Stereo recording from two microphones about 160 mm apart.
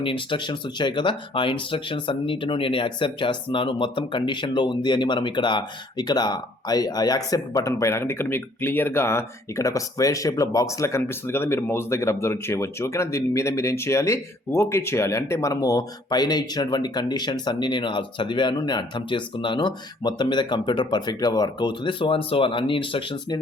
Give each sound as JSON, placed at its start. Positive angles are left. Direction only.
{"t": 0.0, "sound": "speech", "side_deg": 30}